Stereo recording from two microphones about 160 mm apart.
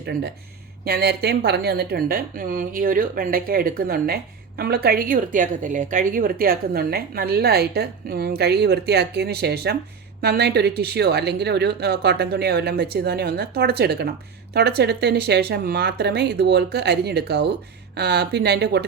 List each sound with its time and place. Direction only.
0.0 s a woman's voice: 90° right